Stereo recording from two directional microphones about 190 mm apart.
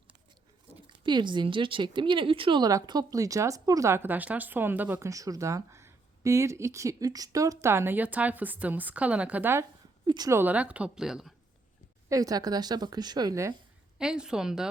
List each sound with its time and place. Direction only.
0.9 s speech: 25° right (ahead or behind); by 11.3 s centre (ahead or behind)
12.0 s speech: 20° right (ahead or behind)
14.0 s a woman's voice: 5° right (ahead or behind)